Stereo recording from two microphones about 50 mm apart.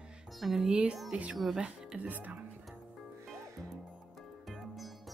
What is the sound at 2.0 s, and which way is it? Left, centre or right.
Speech, right.